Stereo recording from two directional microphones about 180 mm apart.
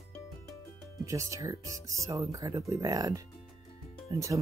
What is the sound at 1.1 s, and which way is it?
Speech, 20° right (ahead or behind).